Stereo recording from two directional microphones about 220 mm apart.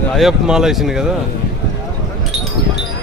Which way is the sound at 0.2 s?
Centre (ahead or behind).